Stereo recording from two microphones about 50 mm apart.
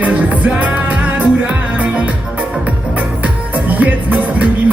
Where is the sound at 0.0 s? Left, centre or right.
Right.